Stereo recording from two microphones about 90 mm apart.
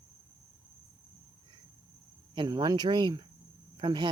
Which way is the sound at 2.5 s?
50° right (ahead or behind).